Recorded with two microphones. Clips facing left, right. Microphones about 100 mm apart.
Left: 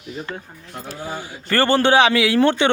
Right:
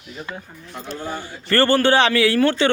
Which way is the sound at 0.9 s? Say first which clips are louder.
Right 1 dB; 10° left (ahead or behind).